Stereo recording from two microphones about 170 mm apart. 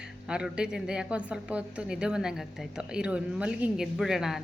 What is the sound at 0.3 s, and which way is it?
A woman's voice, 5° right (ahead or behind).